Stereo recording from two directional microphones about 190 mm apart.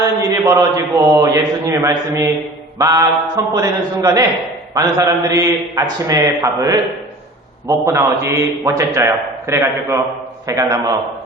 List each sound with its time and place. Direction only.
0.0 s a man's voice: 15° right (ahead or behind)